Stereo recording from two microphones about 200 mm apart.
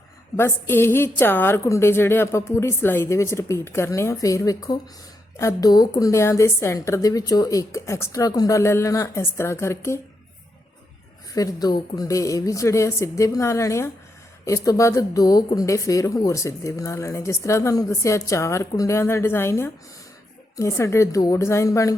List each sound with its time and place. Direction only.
0.3 s speech: 10° left (ahead or behind)
11.3 s speech: 20° left (ahead or behind)